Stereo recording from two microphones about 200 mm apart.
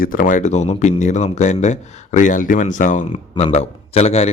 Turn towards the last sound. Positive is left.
turn(degrees=30)  # may be behind; listen again after turning